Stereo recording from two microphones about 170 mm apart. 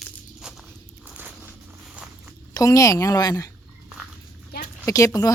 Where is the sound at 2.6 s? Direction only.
20° left (ahead or behind).